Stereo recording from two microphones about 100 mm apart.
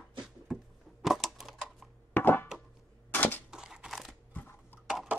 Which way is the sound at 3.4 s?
5° right (ahead or behind).